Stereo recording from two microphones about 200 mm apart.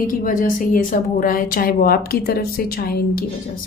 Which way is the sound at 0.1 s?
45° left (ahead or behind).